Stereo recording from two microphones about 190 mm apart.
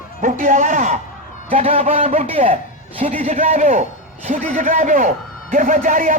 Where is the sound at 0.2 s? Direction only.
45° right (ahead or behind).